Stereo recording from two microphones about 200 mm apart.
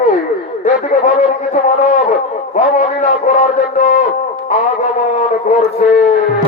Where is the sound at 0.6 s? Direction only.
35° left (ahead or behind).